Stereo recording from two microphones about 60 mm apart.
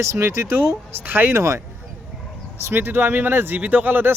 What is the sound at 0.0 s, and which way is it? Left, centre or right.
Speech, right.